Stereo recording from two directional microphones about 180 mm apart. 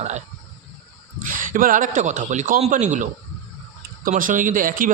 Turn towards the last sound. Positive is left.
turn(degrees=-50)  # may be behind; listen again after turning